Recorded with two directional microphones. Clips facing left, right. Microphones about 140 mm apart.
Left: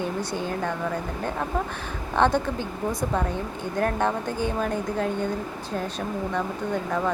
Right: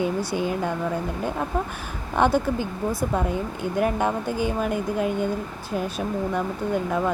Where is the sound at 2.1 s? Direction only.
10° right (ahead or behind).